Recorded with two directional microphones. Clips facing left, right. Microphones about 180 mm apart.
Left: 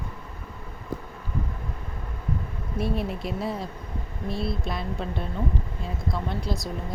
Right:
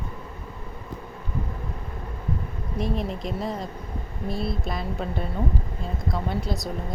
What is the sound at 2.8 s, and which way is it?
Speech, 5° left (ahead or behind).